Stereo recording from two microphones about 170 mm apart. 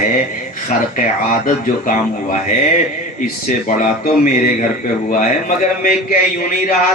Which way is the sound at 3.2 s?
50° left (ahead or behind).